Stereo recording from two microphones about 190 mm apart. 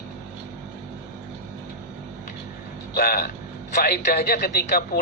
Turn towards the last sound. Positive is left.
turn(degrees=55)  # may be behind; listen again after turning